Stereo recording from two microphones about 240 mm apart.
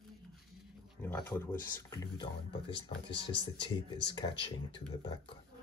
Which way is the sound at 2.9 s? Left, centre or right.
Left.